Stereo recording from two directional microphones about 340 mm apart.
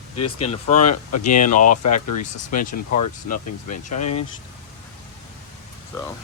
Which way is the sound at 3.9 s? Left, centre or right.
Left.